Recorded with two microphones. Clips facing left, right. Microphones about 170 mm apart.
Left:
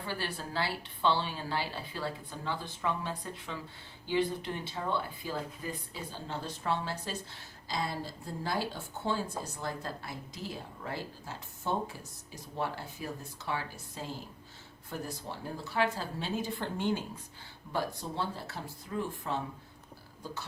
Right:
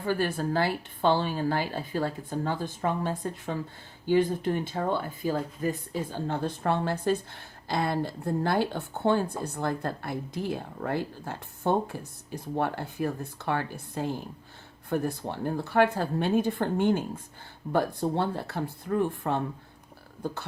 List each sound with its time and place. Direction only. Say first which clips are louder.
0.0 s a woman's voice: right 10 dB; 50° right (ahead or behind)